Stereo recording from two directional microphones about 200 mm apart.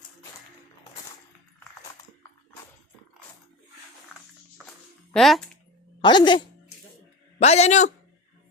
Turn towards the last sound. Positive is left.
turn(degrees=35)  # may be behind; listen again after turning